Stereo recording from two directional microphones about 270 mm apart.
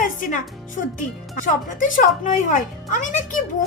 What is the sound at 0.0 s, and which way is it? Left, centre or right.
Music, left.